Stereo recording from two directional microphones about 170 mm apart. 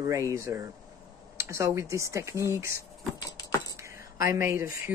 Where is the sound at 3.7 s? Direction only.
15° right (ahead or behind).